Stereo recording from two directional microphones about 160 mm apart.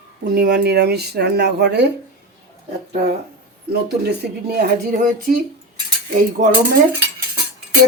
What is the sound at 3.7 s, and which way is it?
Speech, 90° right.